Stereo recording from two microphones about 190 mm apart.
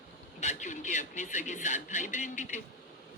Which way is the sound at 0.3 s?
40° left (ahead or behind).